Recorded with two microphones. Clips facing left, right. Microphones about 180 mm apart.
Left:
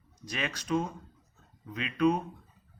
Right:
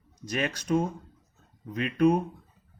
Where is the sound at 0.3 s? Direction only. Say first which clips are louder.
Right 5 dB; 45° right (ahead or behind).